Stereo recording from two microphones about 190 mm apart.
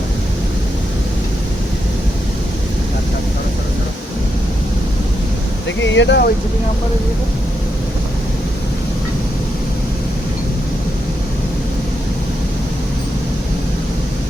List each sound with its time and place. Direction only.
5.6 s speech: 70° left (ahead or behind)